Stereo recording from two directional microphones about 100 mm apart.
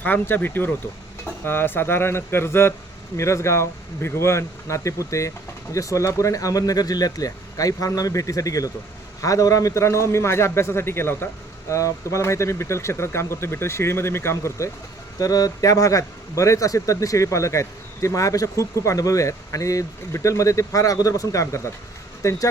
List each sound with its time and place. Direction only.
0.0 s a man's voice: 20° left (ahead or behind)
15.2 s a man's voice: 40° left (ahead or behind)